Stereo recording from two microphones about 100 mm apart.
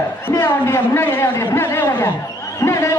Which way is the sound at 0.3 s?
25° left (ahead or behind).